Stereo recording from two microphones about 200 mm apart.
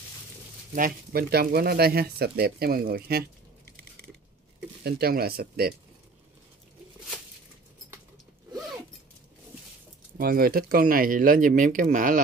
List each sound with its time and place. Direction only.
0.7 s speech: 45° right (ahead or behind)
4.8 s speech: 50° right (ahead or behind)
10.1 s speech: 45° right (ahead or behind)